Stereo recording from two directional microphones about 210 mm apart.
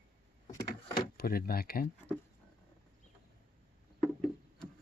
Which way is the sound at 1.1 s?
45° left (ahead or behind).